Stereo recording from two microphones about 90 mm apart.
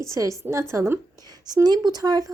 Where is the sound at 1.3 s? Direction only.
50° right (ahead or behind).